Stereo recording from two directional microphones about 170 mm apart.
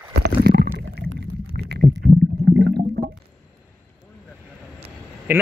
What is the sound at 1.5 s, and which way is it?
Stomach rumble, 70° right (ahead or behind).